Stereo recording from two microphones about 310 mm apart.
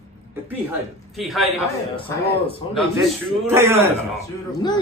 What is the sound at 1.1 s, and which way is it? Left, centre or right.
Speech, centre.